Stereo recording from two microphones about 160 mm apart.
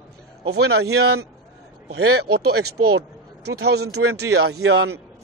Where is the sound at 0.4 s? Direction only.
90° right.